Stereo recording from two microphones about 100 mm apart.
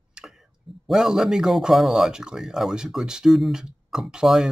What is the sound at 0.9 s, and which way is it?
Speech, 5° right (ahead or behind).